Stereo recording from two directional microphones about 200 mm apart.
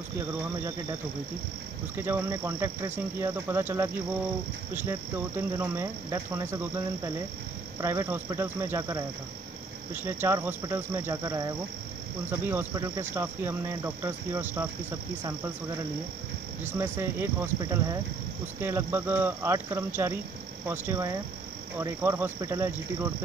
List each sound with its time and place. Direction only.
2.0 s speech: 10° right (ahead or behind)
7.8 s speech: 15° right (ahead or behind)
10.0 s speech: 10° right (ahead or behind)
16.6 s speech: 10° right (ahead or behind)